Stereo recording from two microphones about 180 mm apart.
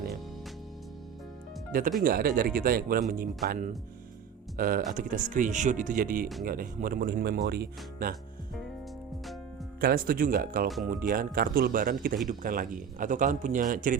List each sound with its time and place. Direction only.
2.0 s speech: 55° right (ahead or behind)
9.8 s speech: 55° right (ahead or behind)